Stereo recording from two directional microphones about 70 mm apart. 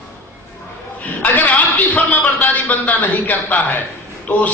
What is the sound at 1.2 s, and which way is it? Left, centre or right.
A man's voice, left.